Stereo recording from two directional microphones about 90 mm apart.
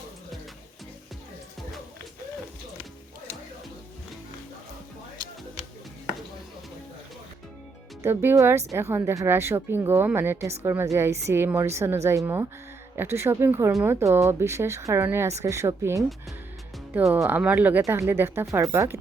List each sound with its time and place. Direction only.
8.0 s a woman's voice: 25° right (ahead or behind)
17.2 s a woman's voice: 15° right (ahead or behind)
17.8 s a woman's voice: 30° right (ahead or behind)